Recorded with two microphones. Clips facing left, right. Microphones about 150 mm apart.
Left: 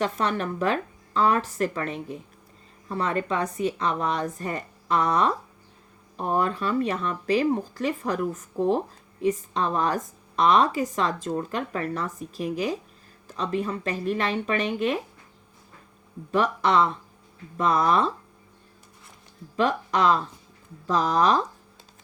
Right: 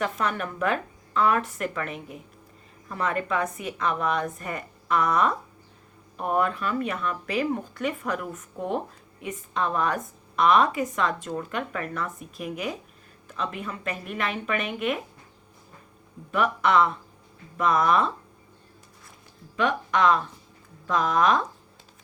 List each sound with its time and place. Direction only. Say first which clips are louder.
0.0 s a woman's voice: left 2 dB; 30° left (ahead or behind)
16.3 s a woman's voice: even; 35° left (ahead or behind)
19.5 s a woman's voice: left 1 dB; 35° left (ahead or behind)